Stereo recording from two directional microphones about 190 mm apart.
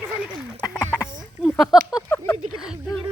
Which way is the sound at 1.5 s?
Centre (ahead or behind).